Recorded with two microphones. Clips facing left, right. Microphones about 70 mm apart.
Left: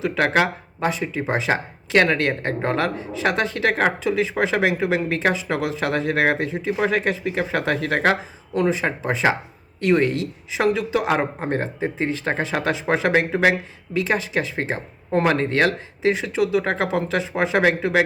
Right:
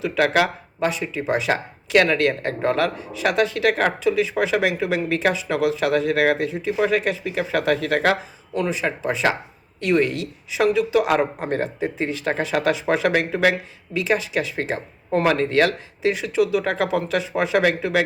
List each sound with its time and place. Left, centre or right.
0.0 s speech: left